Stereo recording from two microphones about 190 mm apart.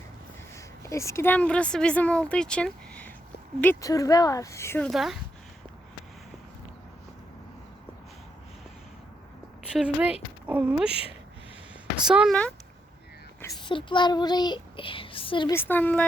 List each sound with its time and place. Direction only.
0.5 s speech: 15° left (ahead or behind)
4.9 s speech: centre (ahead or behind)
9.7 s speech: 5° right (ahead or behind)
12.0 s speech: 5° right (ahead or behind)
13.6 s speech: 25° left (ahead or behind)
15.5 s speech: 10° left (ahead or behind)